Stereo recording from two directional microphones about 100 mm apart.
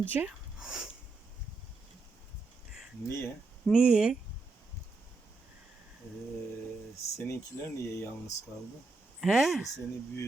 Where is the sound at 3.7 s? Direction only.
10° right (ahead or behind).